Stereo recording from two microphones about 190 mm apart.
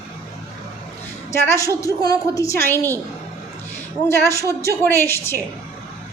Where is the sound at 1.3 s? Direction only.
15° left (ahead or behind).